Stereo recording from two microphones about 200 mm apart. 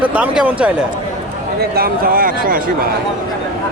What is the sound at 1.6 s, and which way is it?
Speech, 50° right (ahead or behind).